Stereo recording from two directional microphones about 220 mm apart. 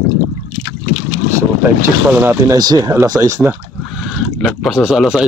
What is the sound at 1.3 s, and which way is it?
Speech, 15° right (ahead or behind).